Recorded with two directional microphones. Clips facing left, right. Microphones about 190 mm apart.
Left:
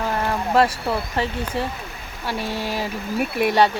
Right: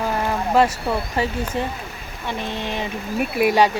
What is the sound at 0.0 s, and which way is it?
Vehicle, centre (ahead or behind).